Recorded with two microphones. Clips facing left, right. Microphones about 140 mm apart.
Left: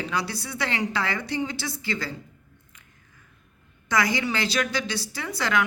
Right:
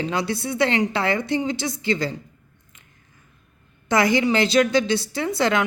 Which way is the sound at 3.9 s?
25° right (ahead or behind).